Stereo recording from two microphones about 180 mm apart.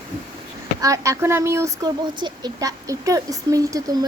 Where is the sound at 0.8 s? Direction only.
20° right (ahead or behind).